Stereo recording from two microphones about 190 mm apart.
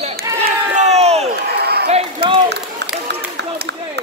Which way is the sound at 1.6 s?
55° right (ahead or behind).